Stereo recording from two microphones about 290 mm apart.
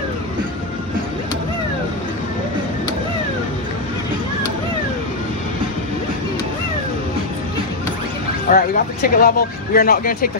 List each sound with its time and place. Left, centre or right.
8.5 s speech: left